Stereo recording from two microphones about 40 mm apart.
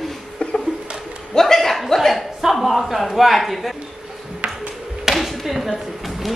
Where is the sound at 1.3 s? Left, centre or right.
Centre.